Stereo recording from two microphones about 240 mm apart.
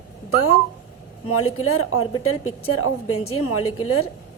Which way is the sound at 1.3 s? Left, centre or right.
Left.